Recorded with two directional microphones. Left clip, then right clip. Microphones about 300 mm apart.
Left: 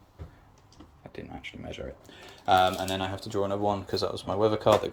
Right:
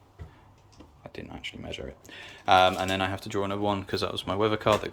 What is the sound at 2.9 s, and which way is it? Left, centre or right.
Speech, right.